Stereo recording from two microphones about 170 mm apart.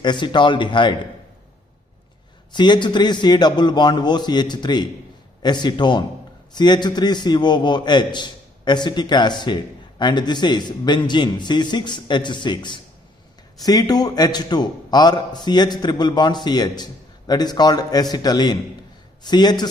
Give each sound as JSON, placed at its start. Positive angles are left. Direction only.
{"t": 0.0, "sound": "a man's voice", "side_deg": 25}
{"t": 2.5, "sound": "a man's voice", "side_deg": 25}